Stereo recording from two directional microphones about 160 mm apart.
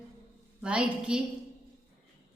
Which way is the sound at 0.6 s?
5° right (ahead or behind).